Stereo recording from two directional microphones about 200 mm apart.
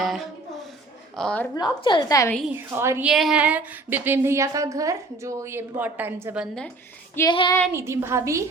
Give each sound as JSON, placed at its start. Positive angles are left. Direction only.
{"t": 0.0, "sound": "a sound", "side_deg": 0}
{"t": 1.1, "sound": "a woman's voice", "side_deg": 5}
{"t": 1.5, "sound": "a woman's voice", "side_deg": 20}
{"t": 2.5, "sound": "a woman's voice", "side_deg": -10}
{"t": 3.1, "sound": "a woman's voice", "side_deg": 0}
{"t": 7.2, "sound": "a woman's voice", "side_deg": 20}
{"t": 7.7, "sound": "a woman's voice", "side_deg": -10}